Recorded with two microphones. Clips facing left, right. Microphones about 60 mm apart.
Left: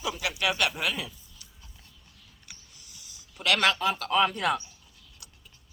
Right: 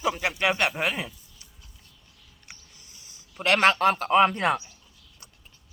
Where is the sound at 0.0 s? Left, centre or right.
Right.